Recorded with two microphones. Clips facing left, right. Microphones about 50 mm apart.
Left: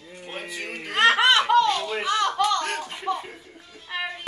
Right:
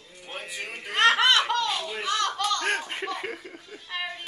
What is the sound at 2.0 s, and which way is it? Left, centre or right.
Slap, centre.